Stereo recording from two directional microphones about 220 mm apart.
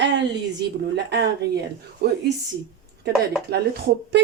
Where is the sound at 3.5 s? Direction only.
50° right (ahead or behind).